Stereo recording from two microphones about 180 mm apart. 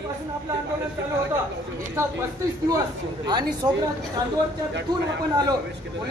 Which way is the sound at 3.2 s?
25° right (ahead or behind).